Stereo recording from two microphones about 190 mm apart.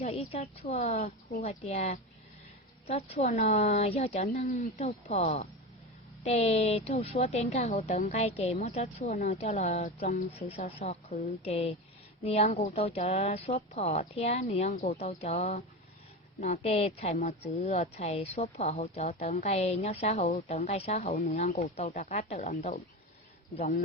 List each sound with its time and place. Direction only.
0.0 s a woman's voice: 30° left (ahead or behind)
14.7 s a woman's voice: 50° left (ahead or behind)
14.9 s a woman's voice: 30° left (ahead or behind)